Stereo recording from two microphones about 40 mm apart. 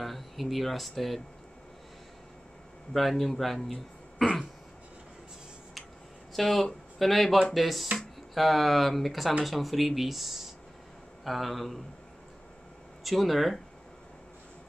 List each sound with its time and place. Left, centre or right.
0.0 s speech: centre
2.9 s a man's voice: centre
6.3 s speech: centre
13.0 s speech: centre